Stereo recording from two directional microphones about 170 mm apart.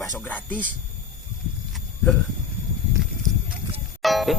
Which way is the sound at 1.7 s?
Centre (ahead or behind).